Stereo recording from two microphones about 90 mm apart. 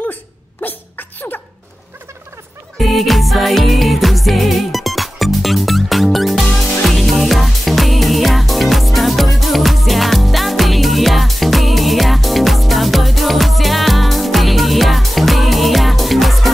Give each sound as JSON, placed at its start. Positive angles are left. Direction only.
{"t": 0.0, "sound": "sneeze", "side_deg": 20}
{"t": 2.8, "sound": "music", "side_deg": 0}